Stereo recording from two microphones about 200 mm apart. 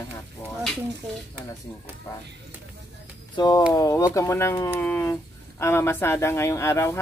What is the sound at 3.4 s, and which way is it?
Speech, 20° left (ahead or behind).